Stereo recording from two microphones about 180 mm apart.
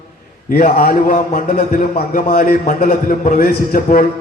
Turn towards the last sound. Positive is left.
turn(degrees=50)  # may be behind; listen again after turning